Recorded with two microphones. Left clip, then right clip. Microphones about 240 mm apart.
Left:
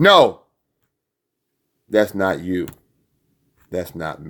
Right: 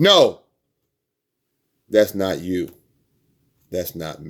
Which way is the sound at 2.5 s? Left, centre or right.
Centre.